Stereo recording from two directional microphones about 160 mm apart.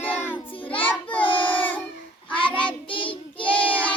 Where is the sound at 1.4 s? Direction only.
10° left (ahead or behind).